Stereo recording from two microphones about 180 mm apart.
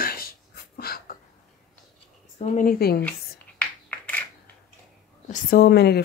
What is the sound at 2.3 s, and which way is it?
Speech, 45° left (ahead or behind).